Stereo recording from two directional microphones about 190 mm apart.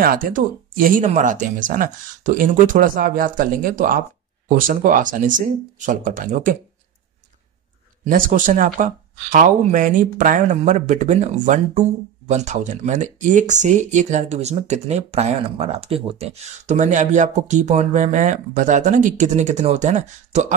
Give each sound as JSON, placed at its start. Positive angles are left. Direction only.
{"t": 0.0, "sound": "speech", "side_deg": -50}
{"t": 8.0, "sound": "speech", "side_deg": -45}